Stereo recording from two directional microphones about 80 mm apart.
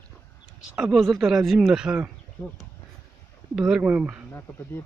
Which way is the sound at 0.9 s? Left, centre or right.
Centre.